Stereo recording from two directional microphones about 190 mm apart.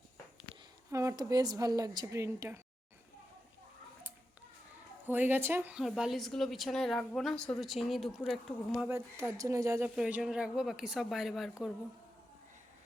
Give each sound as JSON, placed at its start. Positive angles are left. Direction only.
{"t": 0.9, "sound": "a woman's voice", "side_deg": -15}
{"t": 5.0, "sound": "a woman's voice", "side_deg": -10}
{"t": 8.9, "sound": "speech", "side_deg": -15}
{"t": 9.9, "sound": "a woman's voice", "side_deg": -5}